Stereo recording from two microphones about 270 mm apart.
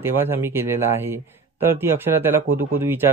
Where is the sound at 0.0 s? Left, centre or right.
Centre.